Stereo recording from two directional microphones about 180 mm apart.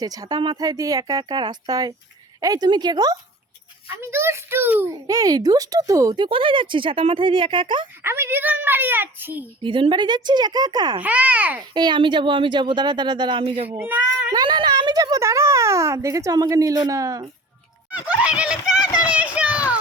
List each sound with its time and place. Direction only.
0.0 s a child's voice: 20° right (ahead or behind)
8.0 s a child's voice: 15° right (ahead or behind)
9.6 s a child's voice: 30° right (ahead or behind)
11.0 s a child's voice: 10° right (ahead or behind)
11.7 s a child's voice: 25° right (ahead or behind)
13.7 s a child's voice: 10° right (ahead or behind)
14.3 s a child's voice: 25° right (ahead or behind)
17.9 s a child's voice: 5° right (ahead or behind)
19.1 s children playing: 5° right (ahead or behind)